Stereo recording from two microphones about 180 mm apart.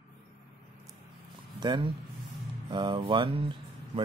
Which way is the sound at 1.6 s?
25° right (ahead or behind).